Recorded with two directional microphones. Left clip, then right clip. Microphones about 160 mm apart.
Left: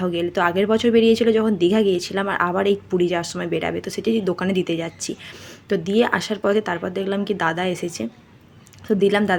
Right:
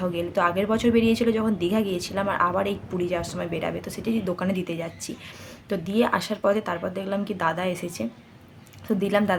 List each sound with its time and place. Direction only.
0.0 s a woman's voice: 20° left (ahead or behind)